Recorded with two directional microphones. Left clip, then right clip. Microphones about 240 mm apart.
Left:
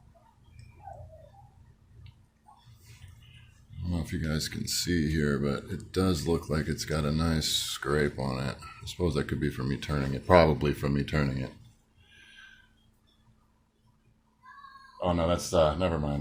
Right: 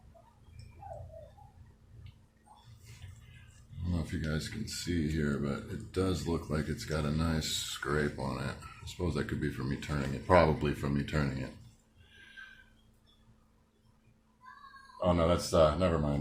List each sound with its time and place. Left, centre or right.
3.9 s speech: left
14.9 s speech: left